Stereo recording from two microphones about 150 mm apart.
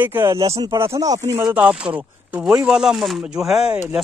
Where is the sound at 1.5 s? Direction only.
10° right (ahead or behind).